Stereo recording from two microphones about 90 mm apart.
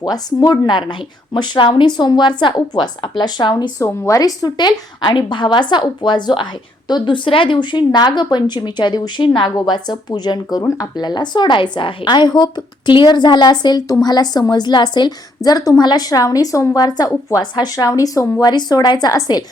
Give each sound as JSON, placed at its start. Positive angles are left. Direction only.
{"t": 0.0, "sound": "a woman's voice", "side_deg": 45}
{"t": 0.6, "sound": "a woman's voice", "side_deg": 60}
{"t": 3.8, "sound": "a woman's voice", "side_deg": 35}
{"t": 9.6, "sound": "a woman's voice", "side_deg": 55}
{"t": 17.4, "sound": "a woman's voice", "side_deg": 55}